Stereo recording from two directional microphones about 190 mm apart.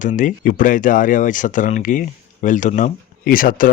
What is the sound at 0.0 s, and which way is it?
Speech, 40° left (ahead or behind).